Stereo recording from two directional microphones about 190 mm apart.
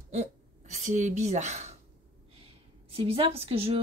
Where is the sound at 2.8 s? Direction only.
30° right (ahead or behind).